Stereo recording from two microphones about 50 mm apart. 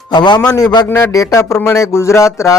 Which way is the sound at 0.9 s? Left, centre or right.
Left.